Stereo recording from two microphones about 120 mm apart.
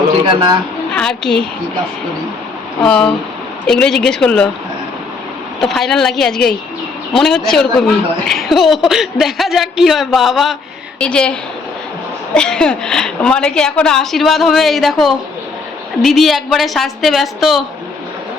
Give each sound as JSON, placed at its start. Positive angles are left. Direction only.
{"t": 0.3, "sound": "speech", "side_deg": -40}
{"t": 0.9, "sound": "a woman's voice", "side_deg": 5}
{"t": 2.8, "sound": "a woman's voice", "side_deg": 5}
{"t": 5.5, "sound": "a woman's voice", "side_deg": 0}
{"t": 11.0, "sound": "a woman's voice", "side_deg": 10}